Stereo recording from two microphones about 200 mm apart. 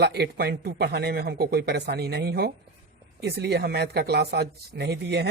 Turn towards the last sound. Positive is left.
turn(degrees=-55)  # may be behind; listen again after turning